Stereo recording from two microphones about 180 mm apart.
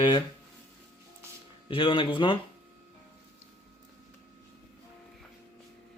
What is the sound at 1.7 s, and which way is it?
Speech, 30° left (ahead or behind).